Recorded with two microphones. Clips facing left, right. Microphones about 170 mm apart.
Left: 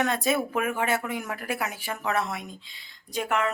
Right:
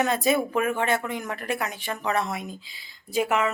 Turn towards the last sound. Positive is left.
turn(degrees=-5)  # may be behind; listen again after turning